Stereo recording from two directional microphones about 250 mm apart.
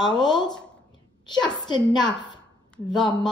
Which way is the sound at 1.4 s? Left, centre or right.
Centre.